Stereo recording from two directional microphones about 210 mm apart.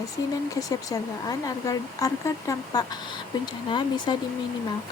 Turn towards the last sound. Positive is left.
turn(degrees=20)  # may be behind; listen again after turning